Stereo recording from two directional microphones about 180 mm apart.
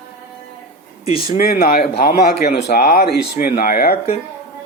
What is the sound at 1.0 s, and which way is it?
Speech, 35° left (ahead or behind).